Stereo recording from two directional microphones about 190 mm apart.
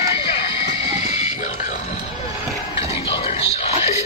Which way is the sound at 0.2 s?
30° left (ahead or behind).